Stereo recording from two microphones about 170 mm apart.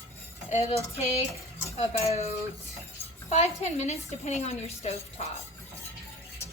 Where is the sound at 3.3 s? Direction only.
40° left (ahead or behind).